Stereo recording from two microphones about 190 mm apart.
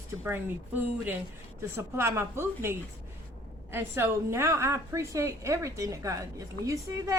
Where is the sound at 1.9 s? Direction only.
15° right (ahead or behind).